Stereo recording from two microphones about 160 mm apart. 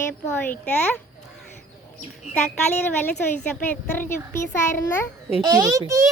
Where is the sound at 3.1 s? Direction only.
10° left (ahead or behind).